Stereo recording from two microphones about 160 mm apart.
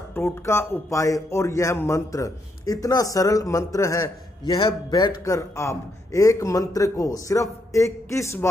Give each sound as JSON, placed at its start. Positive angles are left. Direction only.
{"t": 0.1, "sound": "a man's voice", "side_deg": 15}